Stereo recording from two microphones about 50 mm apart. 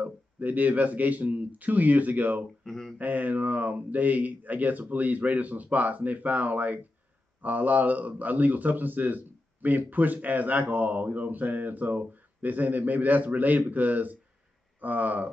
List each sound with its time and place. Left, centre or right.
0.0 s a man's voice: right
2.6 s a sound: centre
3.0 s a man's voice: right